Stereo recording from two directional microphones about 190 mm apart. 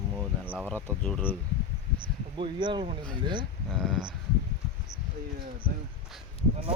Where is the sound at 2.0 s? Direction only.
25° right (ahead or behind).